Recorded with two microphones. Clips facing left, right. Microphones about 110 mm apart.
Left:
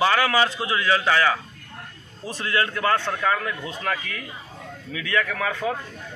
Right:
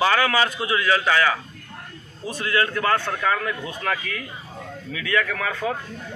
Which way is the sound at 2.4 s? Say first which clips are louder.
Right 1 dB; 30° left (ahead or behind).